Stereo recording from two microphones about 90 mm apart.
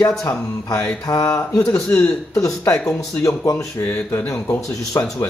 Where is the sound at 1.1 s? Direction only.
40° left (ahead or behind).